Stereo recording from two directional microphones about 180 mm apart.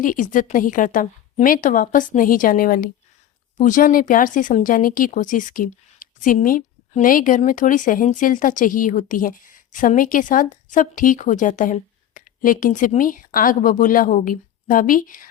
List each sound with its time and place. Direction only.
0.0 s speech: 50° left (ahead or behind)